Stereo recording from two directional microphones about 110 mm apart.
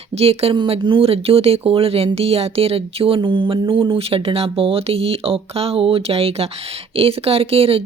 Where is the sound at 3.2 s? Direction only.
50° right (ahead or behind).